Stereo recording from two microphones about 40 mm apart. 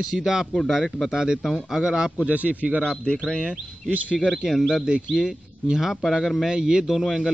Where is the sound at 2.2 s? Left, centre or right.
Right.